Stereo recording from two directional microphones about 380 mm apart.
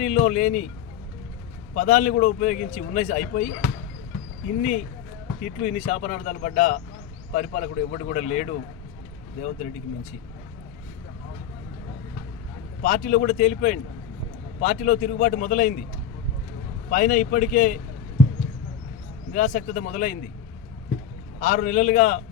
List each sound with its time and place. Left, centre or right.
0.0 s a man's voice: centre
1.7 s a man's voice: left
5.4 s a man's voice: centre
12.8 s a man's voice: left
16.9 s a man's voice: left
19.3 s a man's voice: left
21.3 s a man's voice: left